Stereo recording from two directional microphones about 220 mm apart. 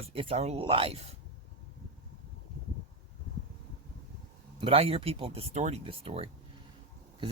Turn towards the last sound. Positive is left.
turn(degrees=-25)  # may be behind; listen again after turning